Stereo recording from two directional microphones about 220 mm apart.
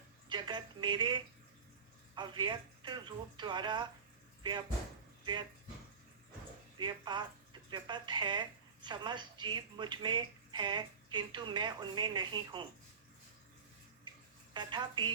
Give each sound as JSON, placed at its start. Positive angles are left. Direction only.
{"t": 0.3, "sound": "speech", "side_deg": -20}
{"t": 5.2, "sound": "speech", "side_deg": -20}
{"t": 6.7, "sound": "speech", "side_deg": -20}
{"t": 14.5, "sound": "speech", "side_deg": -20}